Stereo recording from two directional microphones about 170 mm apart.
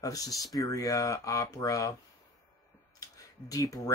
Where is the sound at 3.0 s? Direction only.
20° left (ahead or behind).